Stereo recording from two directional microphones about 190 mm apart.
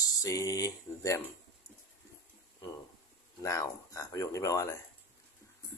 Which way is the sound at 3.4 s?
15° left (ahead or behind).